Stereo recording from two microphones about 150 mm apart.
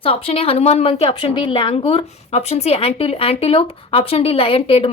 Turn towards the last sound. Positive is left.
turn(degrees=40)  # may be behind; listen again after turning